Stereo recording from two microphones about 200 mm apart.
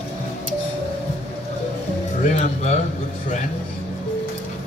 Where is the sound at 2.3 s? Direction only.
35° left (ahead or behind).